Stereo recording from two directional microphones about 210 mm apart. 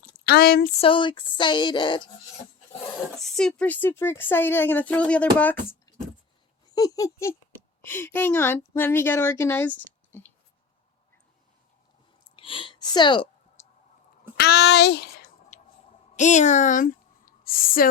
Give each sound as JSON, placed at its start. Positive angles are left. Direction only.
{"t": 0.3, "sound": "speech", "side_deg": 45}
{"t": 0.7, "sound": "speech", "side_deg": 25}
{"t": 3.2, "sound": "a woman's voice", "side_deg": 0}
{"t": 6.7, "sound": "a woman's voice", "side_deg": 15}
{"t": 12.4, "sound": "a sound", "side_deg": 25}
{"t": 14.3, "sound": "speech", "side_deg": 50}
{"t": 16.1, "sound": "speech", "side_deg": 35}